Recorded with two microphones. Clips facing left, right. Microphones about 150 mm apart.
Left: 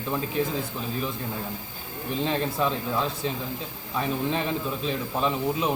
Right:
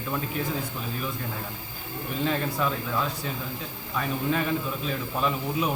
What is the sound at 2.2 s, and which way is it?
A man's voice, 25° left (ahead or behind).